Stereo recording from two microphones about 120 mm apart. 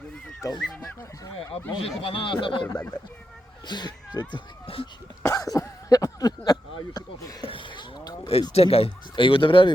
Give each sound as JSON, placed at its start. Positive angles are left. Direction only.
{"t": 0.6, "sound": "speech", "side_deg": 5}
{"t": 1.8, "sound": "speech", "side_deg": 45}
{"t": 3.7, "sound": "speech", "side_deg": 35}
{"t": 5.2, "sound": "a sound", "side_deg": 30}
{"t": 7.4, "sound": "a sound", "side_deg": 45}
{"t": 8.3, "sound": "speech", "side_deg": 55}